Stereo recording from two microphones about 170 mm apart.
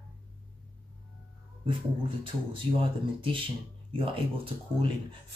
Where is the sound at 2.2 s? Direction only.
30° right (ahead or behind).